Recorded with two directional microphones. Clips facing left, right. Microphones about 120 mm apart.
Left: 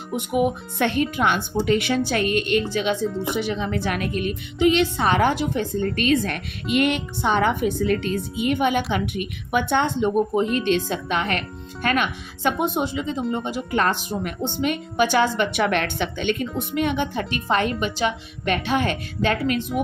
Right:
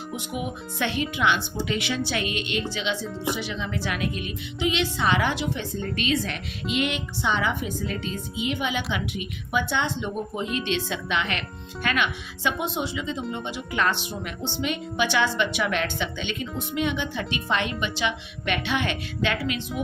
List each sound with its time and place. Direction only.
0.2 s a woman's voice: 50° left (ahead or behind)